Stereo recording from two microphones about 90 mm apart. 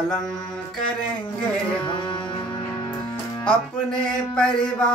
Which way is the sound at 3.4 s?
10° left (ahead or behind).